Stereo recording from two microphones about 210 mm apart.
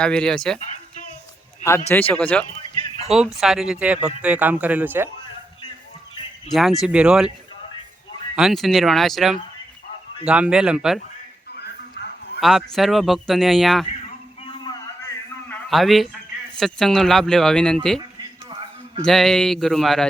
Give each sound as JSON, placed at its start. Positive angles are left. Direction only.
{"t": 0.0, "sound": "speech", "side_deg": 5}
{"t": 1.9, "sound": "speech", "side_deg": 10}
{"t": 6.5, "sound": "speech", "side_deg": 0}
{"t": 8.4, "sound": "speech", "side_deg": 0}
{"t": 11.5, "sound": "a sound", "side_deg": 50}
{"t": 12.4, "sound": "speech", "side_deg": 0}
{"t": 15.4, "sound": "a sound", "side_deg": 0}
{"t": 16.6, "sound": "speech", "side_deg": 0}
{"t": 18.2, "sound": "a sound", "side_deg": -20}
{"t": 19.0, "sound": "speech", "side_deg": 0}